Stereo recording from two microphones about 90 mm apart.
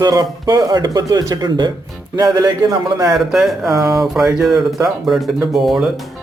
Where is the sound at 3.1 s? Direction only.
5° right (ahead or behind).